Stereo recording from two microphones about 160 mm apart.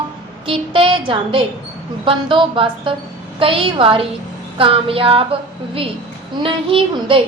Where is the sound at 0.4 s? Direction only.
35° right (ahead or behind).